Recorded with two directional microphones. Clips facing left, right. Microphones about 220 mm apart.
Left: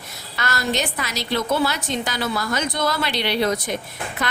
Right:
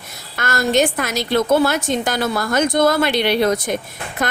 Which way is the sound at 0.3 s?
50° right (ahead or behind).